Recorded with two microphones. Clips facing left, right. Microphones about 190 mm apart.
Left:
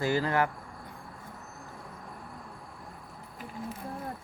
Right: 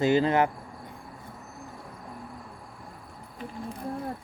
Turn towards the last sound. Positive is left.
turn(degrees=5)  # may be behind; listen again after turning